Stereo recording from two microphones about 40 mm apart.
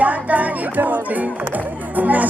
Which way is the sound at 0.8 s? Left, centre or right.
Right.